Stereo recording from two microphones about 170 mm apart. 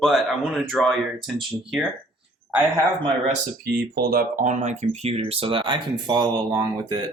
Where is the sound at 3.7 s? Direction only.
70° right (ahead or behind).